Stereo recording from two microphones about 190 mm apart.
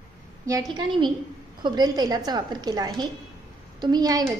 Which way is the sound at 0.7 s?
25° right (ahead or behind).